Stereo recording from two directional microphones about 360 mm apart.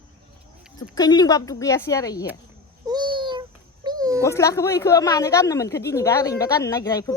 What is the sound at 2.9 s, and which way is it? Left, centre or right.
Baby cry, centre.